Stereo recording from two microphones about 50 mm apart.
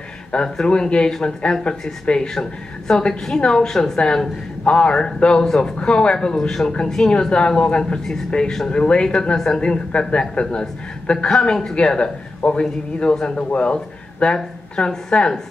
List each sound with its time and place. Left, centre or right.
0.3 s a woman's voice: centre